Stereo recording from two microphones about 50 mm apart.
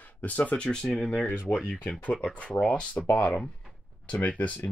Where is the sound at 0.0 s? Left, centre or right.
Left.